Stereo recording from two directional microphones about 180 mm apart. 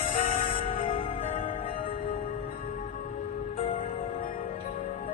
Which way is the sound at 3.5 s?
35° left (ahead or behind).